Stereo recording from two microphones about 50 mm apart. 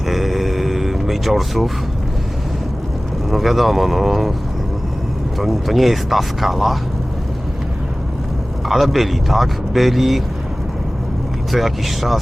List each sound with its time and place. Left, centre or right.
0.1 s a sound: centre
3.2 s speech: centre
5.4 s speech: centre
8.6 s speech: centre
11.5 s speech: centre